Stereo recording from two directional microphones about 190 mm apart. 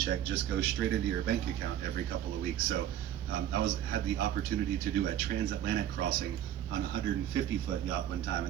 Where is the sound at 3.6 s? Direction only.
50° right (ahead or behind).